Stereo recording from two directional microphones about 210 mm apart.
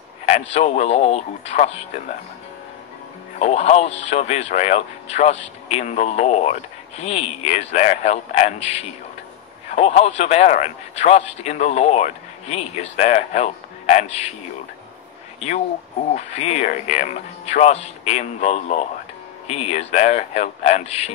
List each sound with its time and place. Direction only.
0.6 s speech: 30° left (ahead or behind)
3.3 s speech: 30° left (ahead or behind)
16.1 s speech: 30° left (ahead or behind)